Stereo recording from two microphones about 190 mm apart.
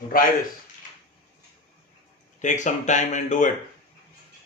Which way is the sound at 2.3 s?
40° left (ahead or behind).